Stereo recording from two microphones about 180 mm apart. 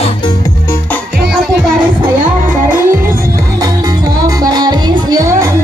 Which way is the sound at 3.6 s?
20° right (ahead or behind).